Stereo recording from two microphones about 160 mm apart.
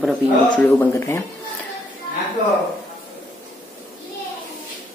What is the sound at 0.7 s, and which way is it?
Speech, 15° left (ahead or behind).